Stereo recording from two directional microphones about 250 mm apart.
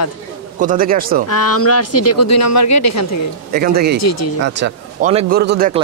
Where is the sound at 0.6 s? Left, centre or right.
Right.